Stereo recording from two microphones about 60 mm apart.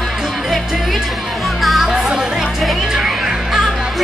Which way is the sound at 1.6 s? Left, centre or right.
Centre.